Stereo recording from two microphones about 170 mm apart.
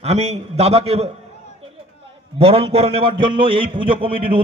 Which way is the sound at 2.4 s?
35° right (ahead or behind).